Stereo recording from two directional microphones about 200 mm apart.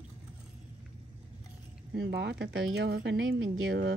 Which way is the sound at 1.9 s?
60° right (ahead or behind).